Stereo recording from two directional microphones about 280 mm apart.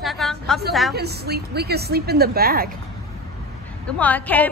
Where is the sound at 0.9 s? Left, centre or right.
Right.